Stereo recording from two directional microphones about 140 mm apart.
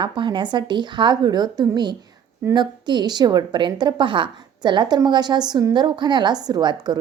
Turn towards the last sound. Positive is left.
turn(degrees=-30)  # may be behind; listen again after turning